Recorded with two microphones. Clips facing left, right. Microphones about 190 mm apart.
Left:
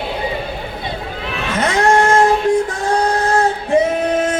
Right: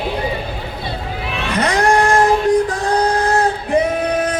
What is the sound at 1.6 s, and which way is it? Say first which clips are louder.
Cat: left 1 dB; 25° left (ahead or behind).